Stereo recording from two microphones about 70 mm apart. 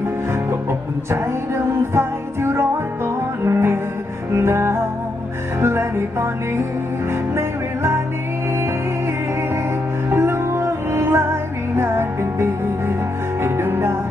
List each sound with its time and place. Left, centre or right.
0.3 s music: right
10.0 s music: right